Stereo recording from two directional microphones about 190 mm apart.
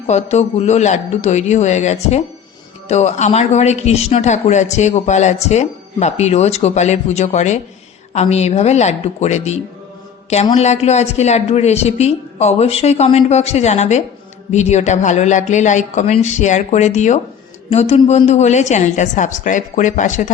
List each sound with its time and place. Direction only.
0.1 s speech: 35° left (ahead or behind)